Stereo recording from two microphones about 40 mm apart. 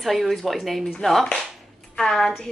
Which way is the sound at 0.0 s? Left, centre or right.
Centre.